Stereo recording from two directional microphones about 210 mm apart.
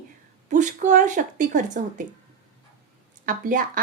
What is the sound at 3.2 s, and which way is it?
Speech, 40° right (ahead or behind).